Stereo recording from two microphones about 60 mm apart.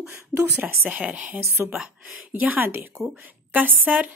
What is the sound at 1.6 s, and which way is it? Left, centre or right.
A woman's voice, right.